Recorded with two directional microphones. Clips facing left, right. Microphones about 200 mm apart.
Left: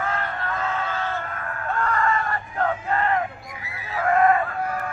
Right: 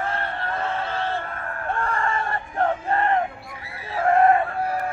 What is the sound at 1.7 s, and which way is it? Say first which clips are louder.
Crowd: left 2 dB; 30° right (ahead or behind).